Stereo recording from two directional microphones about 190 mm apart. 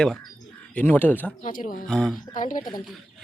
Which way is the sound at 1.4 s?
45° left (ahead or behind).